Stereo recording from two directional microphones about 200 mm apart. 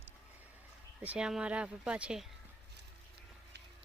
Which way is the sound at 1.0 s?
5° right (ahead or behind).